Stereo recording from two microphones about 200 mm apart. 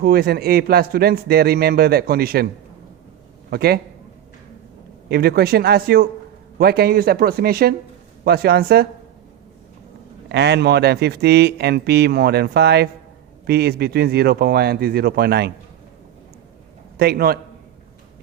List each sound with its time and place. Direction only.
0.0 s a man's voice: 50° right (ahead or behind)
3.5 s a man's voice: 50° right (ahead or behind)
5.0 s a man's voice: 50° right (ahead or behind)
10.2 s a man's voice: 55° right (ahead or behind)
17.0 s a man's voice: 50° right (ahead or behind)